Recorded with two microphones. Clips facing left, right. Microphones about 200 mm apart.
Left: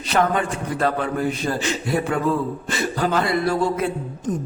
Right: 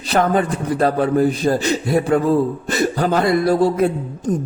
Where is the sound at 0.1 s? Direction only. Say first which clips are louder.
Right 4 dB; 40° right (ahead or behind).